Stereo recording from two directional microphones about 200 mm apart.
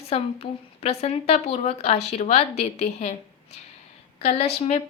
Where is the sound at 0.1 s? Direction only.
30° left (ahead or behind).